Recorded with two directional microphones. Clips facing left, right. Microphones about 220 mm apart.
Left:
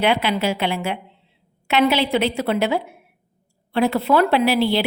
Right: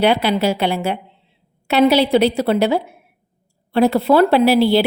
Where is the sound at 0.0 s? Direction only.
35° right (ahead or behind).